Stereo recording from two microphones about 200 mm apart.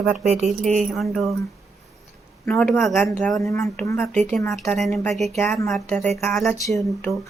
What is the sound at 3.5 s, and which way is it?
Speech, 10° left (ahead or behind).